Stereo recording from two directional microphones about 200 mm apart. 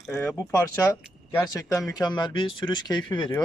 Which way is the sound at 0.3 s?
5° left (ahead or behind).